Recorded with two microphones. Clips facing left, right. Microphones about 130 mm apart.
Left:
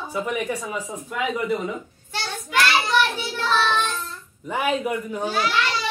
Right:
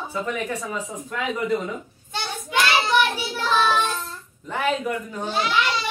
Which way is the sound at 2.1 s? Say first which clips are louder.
Even; 20° right (ahead or behind).